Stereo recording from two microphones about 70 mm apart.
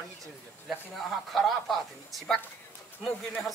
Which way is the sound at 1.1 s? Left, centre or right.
Centre.